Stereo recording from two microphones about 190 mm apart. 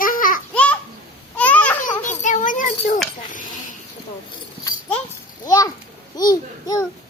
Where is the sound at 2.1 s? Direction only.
40° left (ahead or behind).